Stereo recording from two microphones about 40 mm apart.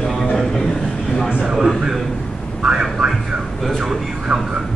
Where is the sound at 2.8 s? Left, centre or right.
Centre.